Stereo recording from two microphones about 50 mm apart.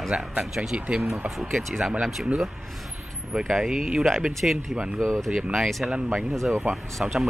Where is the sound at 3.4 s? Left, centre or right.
Centre.